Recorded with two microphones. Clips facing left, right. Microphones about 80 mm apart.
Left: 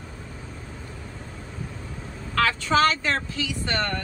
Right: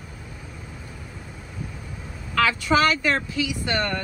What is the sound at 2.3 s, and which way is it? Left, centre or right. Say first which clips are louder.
Vehicle: right 2 dB; left.